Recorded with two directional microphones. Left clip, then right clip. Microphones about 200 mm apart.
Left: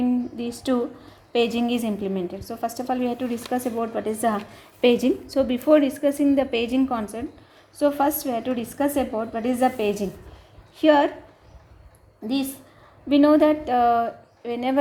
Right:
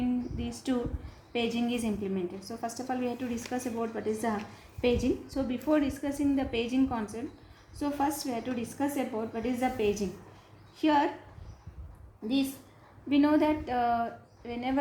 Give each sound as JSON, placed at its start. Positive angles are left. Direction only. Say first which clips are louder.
{"t": 0.3, "sound": "a woman's voice", "louder": "left 9 dB", "side_deg": 40}
{"t": 13.1, "sound": "a woman's voice", "louder": "left 9 dB", "side_deg": 40}